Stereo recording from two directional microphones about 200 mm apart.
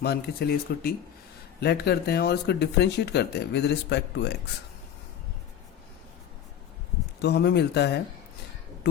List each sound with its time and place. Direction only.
0.0 s speech: 50° left (ahead or behind)
7.2 s speech: 55° left (ahead or behind)